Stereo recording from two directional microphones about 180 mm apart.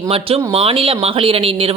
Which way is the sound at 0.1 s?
30° right (ahead or behind).